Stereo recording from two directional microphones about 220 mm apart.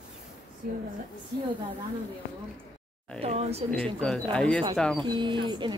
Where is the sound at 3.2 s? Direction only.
30° right (ahead or behind).